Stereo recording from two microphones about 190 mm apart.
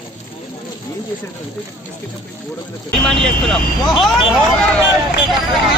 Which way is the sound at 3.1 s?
Centre (ahead or behind).